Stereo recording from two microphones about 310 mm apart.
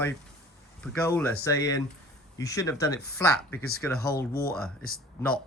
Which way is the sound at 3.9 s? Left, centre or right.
Left.